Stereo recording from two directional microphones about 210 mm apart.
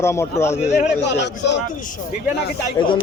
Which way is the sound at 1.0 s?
55° left (ahead or behind).